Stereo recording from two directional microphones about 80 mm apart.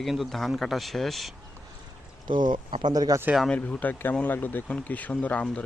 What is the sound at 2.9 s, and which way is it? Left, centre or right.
Speech, right.